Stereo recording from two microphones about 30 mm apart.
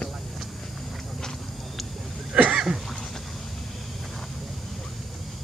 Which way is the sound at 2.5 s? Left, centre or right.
Right.